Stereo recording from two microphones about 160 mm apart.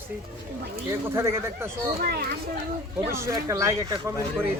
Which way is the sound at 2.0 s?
75° right (ahead or behind).